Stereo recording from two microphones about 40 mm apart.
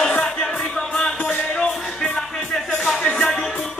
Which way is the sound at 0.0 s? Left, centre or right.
Left.